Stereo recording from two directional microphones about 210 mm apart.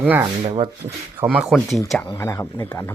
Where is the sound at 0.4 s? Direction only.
25° right (ahead or behind).